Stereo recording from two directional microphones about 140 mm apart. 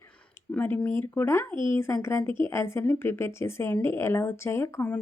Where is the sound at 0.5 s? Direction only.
10° left (ahead or behind).